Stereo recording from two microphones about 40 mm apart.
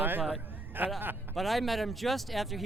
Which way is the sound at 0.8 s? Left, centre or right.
Right.